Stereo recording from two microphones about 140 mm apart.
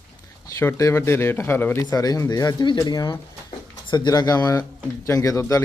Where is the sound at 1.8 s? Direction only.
25° left (ahead or behind).